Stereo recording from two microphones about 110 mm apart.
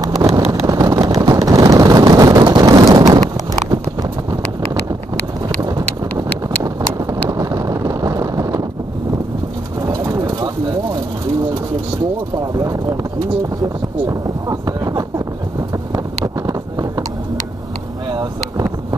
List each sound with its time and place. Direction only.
0.0 s vehicle: 30° right (ahead or behind)
5.6 s a sound: 35° right (ahead or behind)
9.8 s bird: 30° right (ahead or behind)
12.5 s clip-clop: 30° right (ahead or behind)
14.0 s a sound: 35° right (ahead or behind)
16.4 s vehicle: 35° right (ahead or behind)
18.1 s boat: 35° right (ahead or behind)